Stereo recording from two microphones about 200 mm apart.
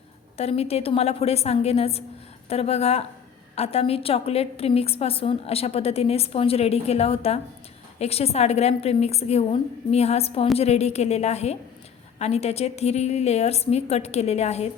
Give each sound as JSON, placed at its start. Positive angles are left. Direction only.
{"t": 0.3, "sound": "a woman's voice", "side_deg": 30}